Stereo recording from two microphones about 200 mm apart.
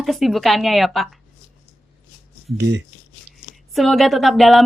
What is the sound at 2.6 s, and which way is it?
Speech, 60° right (ahead or behind).